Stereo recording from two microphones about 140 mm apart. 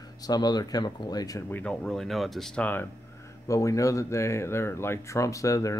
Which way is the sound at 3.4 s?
25° left (ahead or behind).